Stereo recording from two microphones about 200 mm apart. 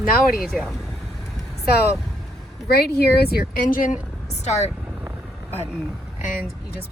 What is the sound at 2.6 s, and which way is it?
Speech, 50° left (ahead or behind).